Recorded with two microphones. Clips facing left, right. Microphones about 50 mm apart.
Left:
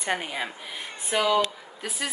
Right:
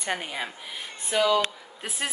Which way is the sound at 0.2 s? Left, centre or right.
Centre.